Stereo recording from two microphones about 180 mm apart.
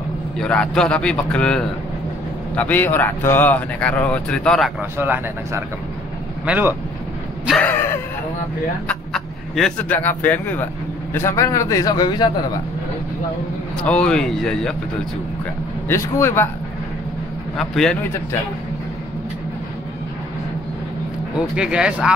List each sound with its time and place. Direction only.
0.4 s a man's voice: 5° left (ahead or behind)
4.9 s speech: 10° right (ahead or behind)
7.4 s a sound: 5° left (ahead or behind)
8.8 s a man's voice: 5° left (ahead or behind); by 12.3 s 25° left (ahead or behind)
13.8 s a man's voice: 5° left (ahead or behind)
15.9 s a man's voice: 15° left (ahead or behind)
17.6 s a man's voice: 5° left (ahead or behind)
21.5 s a man's voice: 5° right (ahead or behind)